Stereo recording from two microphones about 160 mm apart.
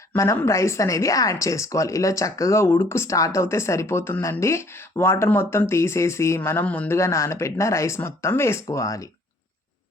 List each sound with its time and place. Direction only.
0.1 s speech: 15° left (ahead or behind)